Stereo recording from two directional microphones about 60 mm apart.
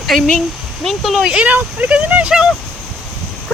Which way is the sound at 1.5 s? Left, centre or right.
Right.